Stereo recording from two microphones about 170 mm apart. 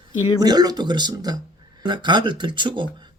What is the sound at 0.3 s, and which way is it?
Speech, 25° right (ahead or behind).